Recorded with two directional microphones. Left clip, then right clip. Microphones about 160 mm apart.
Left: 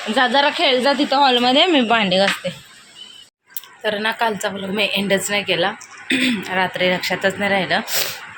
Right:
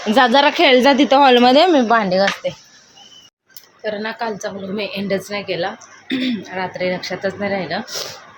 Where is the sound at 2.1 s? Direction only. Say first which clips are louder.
Right 1 dB; 15° right (ahead or behind).